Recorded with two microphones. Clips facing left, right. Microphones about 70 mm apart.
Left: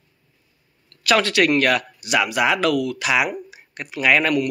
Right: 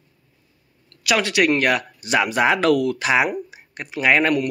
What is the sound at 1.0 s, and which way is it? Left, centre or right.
Speech, centre.